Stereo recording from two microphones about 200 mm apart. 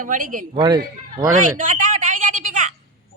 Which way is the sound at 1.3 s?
40° right (ahead or behind).